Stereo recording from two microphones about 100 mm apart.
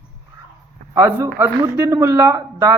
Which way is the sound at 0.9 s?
35° right (ahead or behind).